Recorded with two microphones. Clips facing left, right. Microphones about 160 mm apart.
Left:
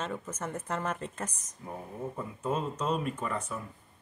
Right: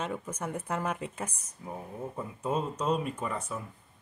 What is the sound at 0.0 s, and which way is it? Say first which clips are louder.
Speech: right 1 dB; 10° right (ahead or behind).